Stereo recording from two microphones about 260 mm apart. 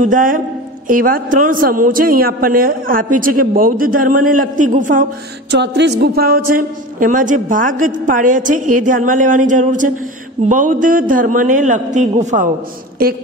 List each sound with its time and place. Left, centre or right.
0.0 s a man's voice: right
5.5 s a man's voice: right